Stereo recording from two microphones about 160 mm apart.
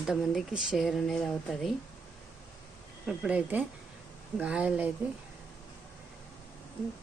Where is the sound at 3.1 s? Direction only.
10° right (ahead or behind).